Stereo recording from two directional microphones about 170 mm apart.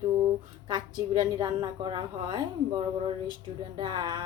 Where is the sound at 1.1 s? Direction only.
25° right (ahead or behind).